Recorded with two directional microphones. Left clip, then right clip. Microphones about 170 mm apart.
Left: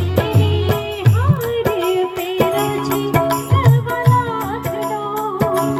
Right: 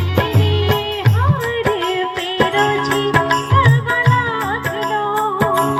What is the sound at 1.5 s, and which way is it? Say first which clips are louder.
Music: left 3 dB; 20° left (ahead or behind).